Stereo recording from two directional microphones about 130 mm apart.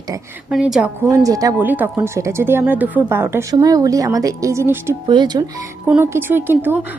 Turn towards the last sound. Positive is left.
turn(degrees=-15)  # may be behind; listen again after turning